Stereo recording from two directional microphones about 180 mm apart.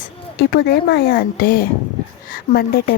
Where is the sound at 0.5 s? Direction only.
65° left (ahead or behind).